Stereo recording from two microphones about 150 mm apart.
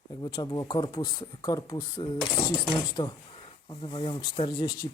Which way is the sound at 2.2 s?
5° left (ahead or behind).